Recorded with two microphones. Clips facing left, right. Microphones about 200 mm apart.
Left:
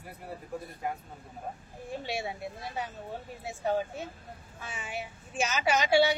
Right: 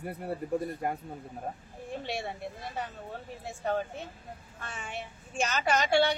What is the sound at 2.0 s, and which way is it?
Speech, 5° left (ahead or behind).